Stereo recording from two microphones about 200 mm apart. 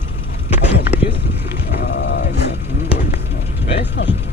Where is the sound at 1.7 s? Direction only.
55° left (ahead or behind).